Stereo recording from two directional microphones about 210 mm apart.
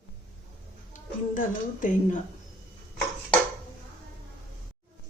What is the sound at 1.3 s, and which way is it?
Speech, 40° left (ahead or behind).